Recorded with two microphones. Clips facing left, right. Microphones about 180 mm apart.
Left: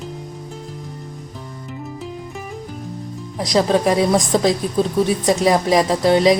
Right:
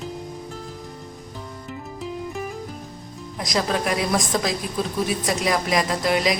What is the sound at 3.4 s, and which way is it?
A woman's voice, 30° left (ahead or behind).